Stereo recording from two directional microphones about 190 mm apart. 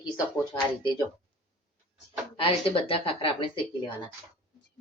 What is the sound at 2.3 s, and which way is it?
Speech, 30° left (ahead or behind).